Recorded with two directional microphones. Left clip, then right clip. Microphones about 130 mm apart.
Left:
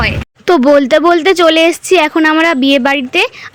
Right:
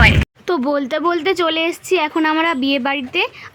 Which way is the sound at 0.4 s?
45° left (ahead or behind).